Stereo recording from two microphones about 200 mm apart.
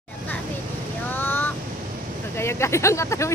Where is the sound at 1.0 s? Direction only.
10° left (ahead or behind).